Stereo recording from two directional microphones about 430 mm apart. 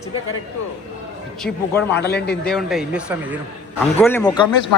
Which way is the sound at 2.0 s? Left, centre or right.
Left.